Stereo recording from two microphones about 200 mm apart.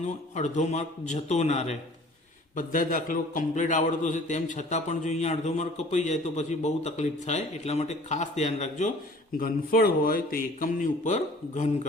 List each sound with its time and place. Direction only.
0.3 s a man's voice: 35° left (ahead or behind)
9.4 s speech: 45° left (ahead or behind)